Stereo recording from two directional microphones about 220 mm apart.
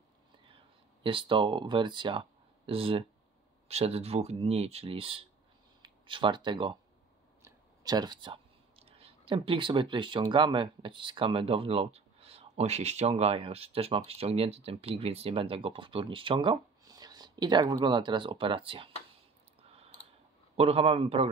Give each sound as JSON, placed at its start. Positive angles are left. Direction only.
{"t": 1.0, "sound": "speech", "side_deg": -25}
{"t": 20.5, "sound": "speech", "side_deg": -25}